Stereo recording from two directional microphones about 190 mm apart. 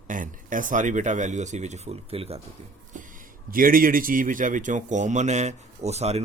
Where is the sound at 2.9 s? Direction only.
45° right (ahead or behind).